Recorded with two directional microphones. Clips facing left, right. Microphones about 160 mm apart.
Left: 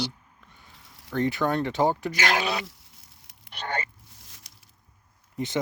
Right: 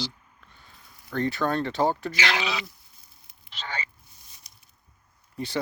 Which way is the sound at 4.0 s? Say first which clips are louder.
Left 3 dB; 90° left.